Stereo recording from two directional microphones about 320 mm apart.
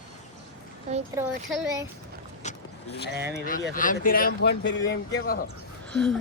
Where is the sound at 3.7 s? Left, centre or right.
Left.